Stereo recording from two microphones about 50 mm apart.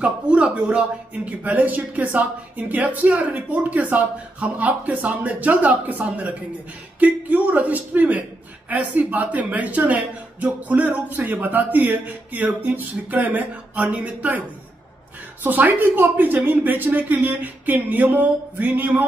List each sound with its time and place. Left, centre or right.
0.0 s speech: right
15.4 s speech: right